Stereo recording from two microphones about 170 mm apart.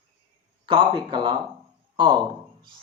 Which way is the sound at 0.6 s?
30° right (ahead or behind).